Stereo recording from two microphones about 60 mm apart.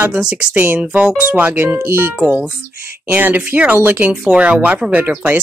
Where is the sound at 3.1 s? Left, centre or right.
Right.